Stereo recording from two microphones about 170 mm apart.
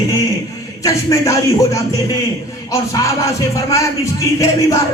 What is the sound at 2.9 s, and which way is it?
Music, 20° left (ahead or behind).